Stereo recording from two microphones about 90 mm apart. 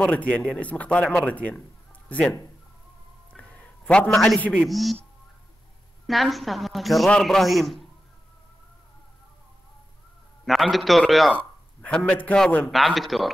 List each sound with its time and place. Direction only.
0.3 s speech: 10° left (ahead or behind)
3.3 s a sound: 15° left (ahead or behind)
4.6 s a woman's voice: centre (ahead or behind)
6.0 s a woman's voice: centre (ahead or behind)
10.4 s a woman's voice: centre (ahead or behind)
11.8 s a man's voice: 15° left (ahead or behind)
12.7 s a woman's voice: centre (ahead or behind)